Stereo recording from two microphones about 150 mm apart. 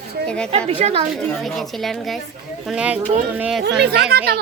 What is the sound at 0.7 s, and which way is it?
Speech, 45° right (ahead or behind).